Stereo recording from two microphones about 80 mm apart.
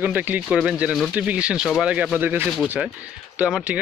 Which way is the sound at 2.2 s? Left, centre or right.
Right.